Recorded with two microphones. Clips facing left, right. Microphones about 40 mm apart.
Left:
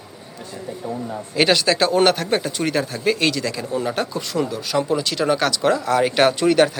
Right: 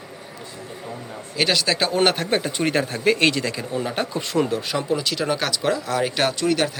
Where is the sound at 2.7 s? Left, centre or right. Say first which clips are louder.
Right 1 dB; right.